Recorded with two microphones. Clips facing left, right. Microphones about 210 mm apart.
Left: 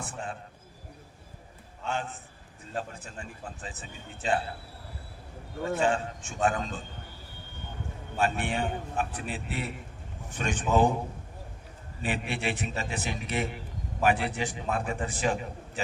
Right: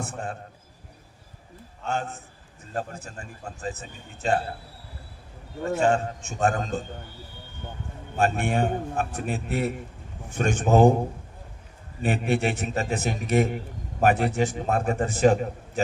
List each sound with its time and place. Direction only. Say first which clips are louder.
0.0 s a man's voice: right 4 dB; 45° right (ahead or behind)
1.9 s a man's voice: right 4 dB; 45° right (ahead or behind)
5.8 s a man's voice: right 6 dB; 45° right (ahead or behind)
8.2 s a man's voice: right 5 dB; 45° right (ahead or behind)
12.0 s a man's voice: right 7 dB; 45° right (ahead or behind)